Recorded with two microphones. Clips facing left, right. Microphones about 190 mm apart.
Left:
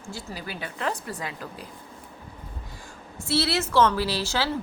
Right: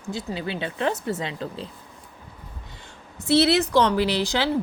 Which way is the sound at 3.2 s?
20° right (ahead or behind).